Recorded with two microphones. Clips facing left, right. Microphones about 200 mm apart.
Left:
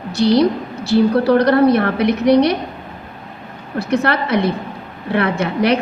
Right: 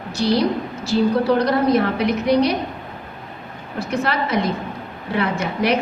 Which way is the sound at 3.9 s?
65° left (ahead or behind).